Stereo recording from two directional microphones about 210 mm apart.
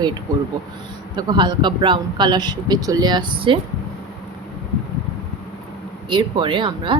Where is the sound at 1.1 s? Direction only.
20° right (ahead or behind).